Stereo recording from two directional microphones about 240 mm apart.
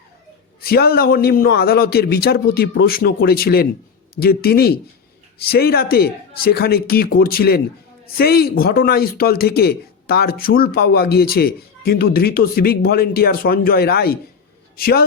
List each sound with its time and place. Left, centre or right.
0.6 s speech: left